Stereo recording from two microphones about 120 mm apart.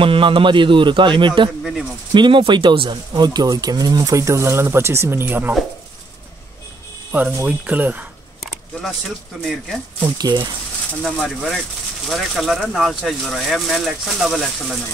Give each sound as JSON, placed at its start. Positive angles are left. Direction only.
{"t": 0.0, "sound": "a man's voice", "side_deg": -45}
{"t": 1.6, "sound": "a sound", "side_deg": 0}
{"t": 2.1, "sound": "a man's voice", "side_deg": -40}
{"t": 3.1, "sound": "speech", "side_deg": -35}
{"t": 7.1, "sound": "speech", "side_deg": -15}
{"t": 8.4, "sound": "a sound", "side_deg": 0}
{"t": 9.4, "sound": "speech", "side_deg": 5}
{"t": 10.1, "sound": "speech", "side_deg": -35}
{"t": 11.0, "sound": "speech", "side_deg": 5}